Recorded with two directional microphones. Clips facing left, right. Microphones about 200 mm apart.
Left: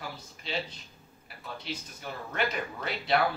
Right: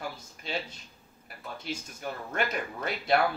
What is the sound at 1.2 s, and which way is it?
Speech, 45° right (ahead or behind).